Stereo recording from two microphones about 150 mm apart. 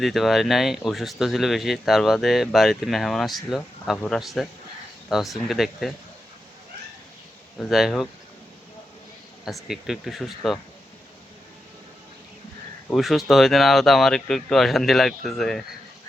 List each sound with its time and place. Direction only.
0.0 s speech: centre (ahead or behind)
7.7 s speech: centre (ahead or behind)
9.4 s speech: centre (ahead or behind)
12.9 s speech: centre (ahead or behind)